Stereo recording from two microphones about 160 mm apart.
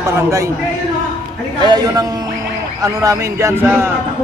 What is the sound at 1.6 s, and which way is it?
Speech, 25° right (ahead or behind).